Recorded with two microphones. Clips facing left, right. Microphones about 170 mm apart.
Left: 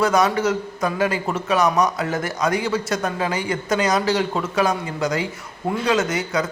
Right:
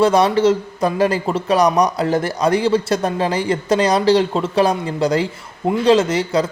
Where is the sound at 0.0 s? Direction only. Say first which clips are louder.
Right 5 dB; 30° right (ahead or behind).